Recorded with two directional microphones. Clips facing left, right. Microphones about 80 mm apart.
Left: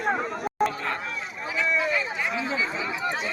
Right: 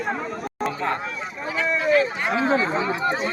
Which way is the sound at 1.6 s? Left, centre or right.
Right.